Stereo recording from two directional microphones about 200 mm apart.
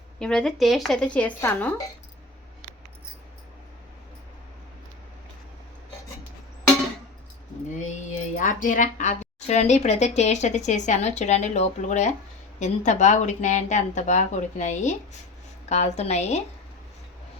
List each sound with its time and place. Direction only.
0.2 s a woman's voice: 5° left (ahead or behind)
7.8 s a woman's voice: 35° left (ahead or behind)